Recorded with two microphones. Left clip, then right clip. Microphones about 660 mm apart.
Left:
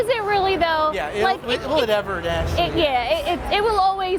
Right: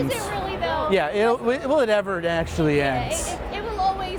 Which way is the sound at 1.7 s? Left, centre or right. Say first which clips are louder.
Even; right.